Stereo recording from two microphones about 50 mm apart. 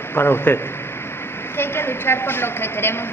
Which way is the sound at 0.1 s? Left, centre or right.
Left.